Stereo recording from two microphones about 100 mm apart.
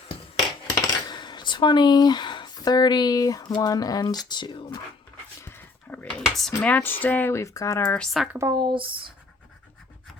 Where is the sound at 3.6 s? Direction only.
35° left (ahead or behind).